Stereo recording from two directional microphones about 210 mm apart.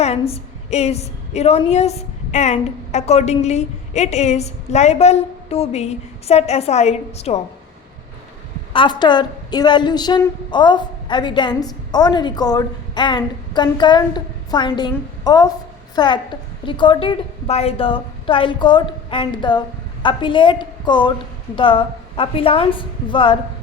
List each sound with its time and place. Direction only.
0.0 s a woman's voice: 30° left (ahead or behind)
8.7 s a woman's voice: 20° left (ahead or behind)